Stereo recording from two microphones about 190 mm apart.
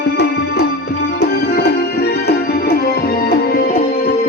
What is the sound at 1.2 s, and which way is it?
Music, 55° left (ahead or behind).